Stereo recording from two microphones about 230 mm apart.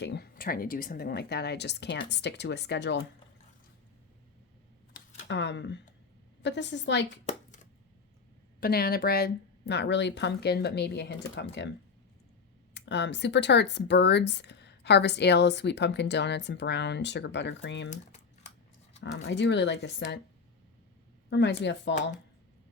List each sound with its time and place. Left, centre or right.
0.0 s speech: left
5.3 s speech: left
7.3 s a sound: left
8.6 s speech: left
12.7 s speech: left
17.9 s typing: left
19.1 s speech: left
21.2 s speech: left